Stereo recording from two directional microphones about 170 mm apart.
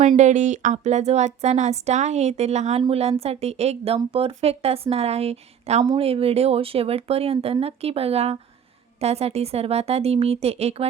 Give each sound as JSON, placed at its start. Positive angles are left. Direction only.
{"t": 0.2, "sound": "a woman's voice", "side_deg": -45}